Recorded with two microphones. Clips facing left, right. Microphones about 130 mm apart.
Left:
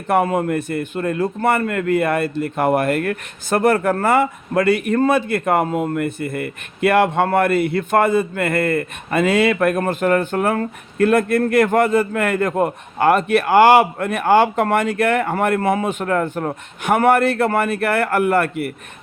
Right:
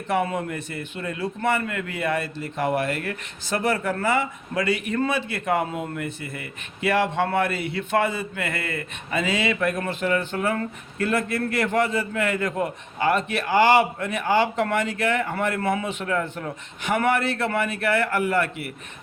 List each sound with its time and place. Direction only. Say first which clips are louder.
0.1 s a man's voice: left 7 dB; 50° left (ahead or behind)